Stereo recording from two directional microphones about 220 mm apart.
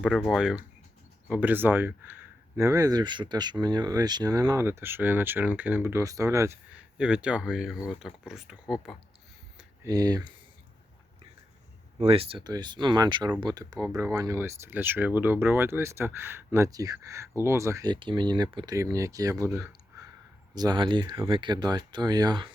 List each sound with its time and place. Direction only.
0.0 s speech: centre (ahead or behind)
9.8 s speech: 15° right (ahead or behind)
11.9 s speech: 25° right (ahead or behind)